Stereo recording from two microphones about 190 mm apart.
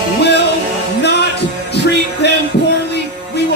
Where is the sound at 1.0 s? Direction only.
60° left (ahead or behind).